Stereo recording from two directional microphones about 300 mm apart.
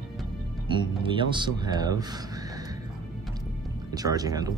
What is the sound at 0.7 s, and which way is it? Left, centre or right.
Speech, centre.